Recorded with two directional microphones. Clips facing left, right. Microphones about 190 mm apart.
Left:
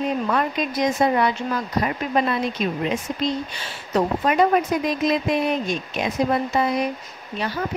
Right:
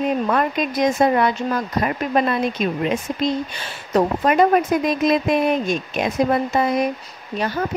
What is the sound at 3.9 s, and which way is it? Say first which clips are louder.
Speech: right 3 dB; 50° right (ahead or behind).